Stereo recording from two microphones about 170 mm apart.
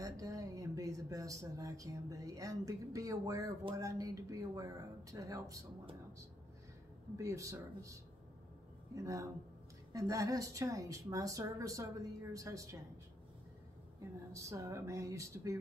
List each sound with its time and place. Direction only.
0.0 s speech: 20° right (ahead or behind)
7.2 s speech: 20° right (ahead or behind)
14.3 s speech: 20° right (ahead or behind)